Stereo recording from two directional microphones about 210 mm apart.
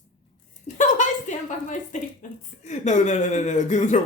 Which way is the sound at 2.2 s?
35° left (ahead or behind).